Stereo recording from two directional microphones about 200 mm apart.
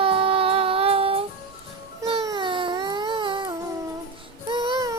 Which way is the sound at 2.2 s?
25° right (ahead or behind).